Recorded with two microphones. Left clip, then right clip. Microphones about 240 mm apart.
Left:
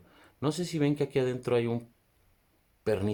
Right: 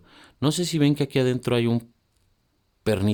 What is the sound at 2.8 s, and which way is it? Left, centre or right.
Speech, right.